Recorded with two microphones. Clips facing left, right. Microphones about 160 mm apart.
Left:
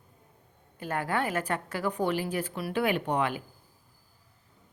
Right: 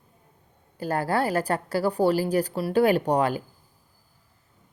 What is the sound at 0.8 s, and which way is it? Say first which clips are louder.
A woman's voice: right 5 dB; 35° right (ahead or behind).